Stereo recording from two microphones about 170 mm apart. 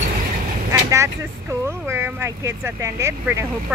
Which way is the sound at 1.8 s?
15° right (ahead or behind).